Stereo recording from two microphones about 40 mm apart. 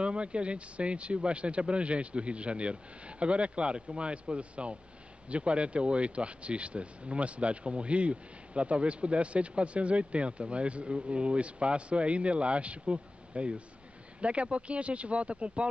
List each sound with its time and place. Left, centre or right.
0.0 s speech: right